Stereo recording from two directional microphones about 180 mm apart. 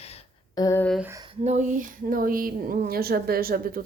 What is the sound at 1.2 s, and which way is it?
A woman's voice, 40° right (ahead or behind).